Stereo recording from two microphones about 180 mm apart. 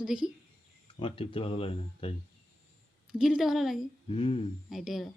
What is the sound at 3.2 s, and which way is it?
Speech, centre (ahead or behind).